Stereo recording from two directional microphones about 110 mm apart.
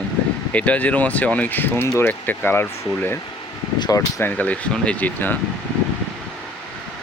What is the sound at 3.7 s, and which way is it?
Speech, 40° left (ahead or behind).